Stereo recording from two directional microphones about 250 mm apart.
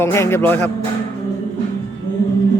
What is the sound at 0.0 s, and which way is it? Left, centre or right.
Speech, centre.